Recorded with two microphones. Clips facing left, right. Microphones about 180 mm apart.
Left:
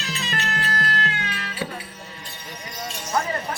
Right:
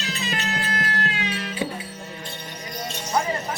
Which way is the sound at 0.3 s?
15° right (ahead or behind).